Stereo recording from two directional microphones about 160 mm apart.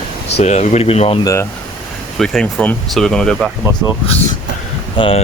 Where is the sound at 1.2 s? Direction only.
20° left (ahead or behind).